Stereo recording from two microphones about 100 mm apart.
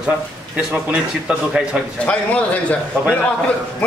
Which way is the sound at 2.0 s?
15° left (ahead or behind).